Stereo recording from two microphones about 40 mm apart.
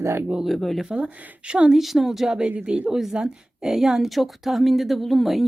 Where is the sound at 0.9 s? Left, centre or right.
Right.